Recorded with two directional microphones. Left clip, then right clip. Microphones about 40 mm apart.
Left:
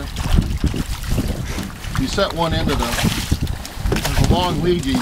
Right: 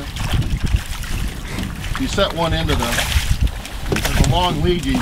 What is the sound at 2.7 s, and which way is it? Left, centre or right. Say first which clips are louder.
Speech: right 1 dB; centre.